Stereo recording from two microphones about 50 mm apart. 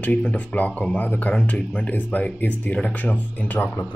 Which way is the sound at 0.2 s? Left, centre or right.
Left.